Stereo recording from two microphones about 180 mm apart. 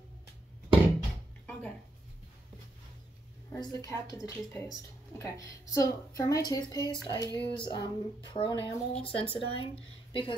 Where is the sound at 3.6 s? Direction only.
20° left (ahead or behind).